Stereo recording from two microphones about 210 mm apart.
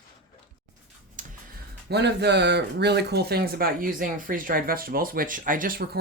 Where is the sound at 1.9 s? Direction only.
55° right (ahead or behind).